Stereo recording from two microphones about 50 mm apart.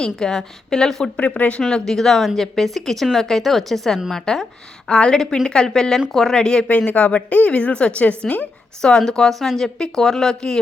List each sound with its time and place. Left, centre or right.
0.0 s a woman's voice: centre
1.1 s a woman's voice: left
1.6 s a woman's voice: centre
4.9 s a woman's voice: left; by 6.3 s centre
6.3 s a woman's voice: centre
6.7 s a woman's voice: left
8.8 s a woman's voice: centre